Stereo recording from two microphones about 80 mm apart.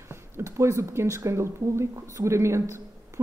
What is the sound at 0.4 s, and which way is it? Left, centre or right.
Speech, right.